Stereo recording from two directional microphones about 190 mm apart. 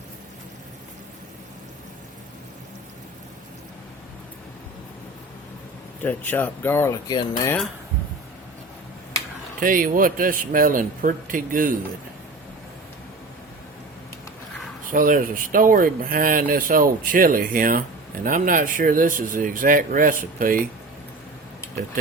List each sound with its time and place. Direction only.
6.0 s speech: 10° left (ahead or behind)
9.6 s speech: 45° right (ahead or behind)
14.8 s speech: 45° right (ahead or behind)